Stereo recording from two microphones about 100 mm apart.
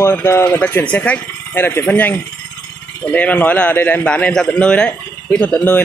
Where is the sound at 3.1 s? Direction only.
15° left (ahead or behind).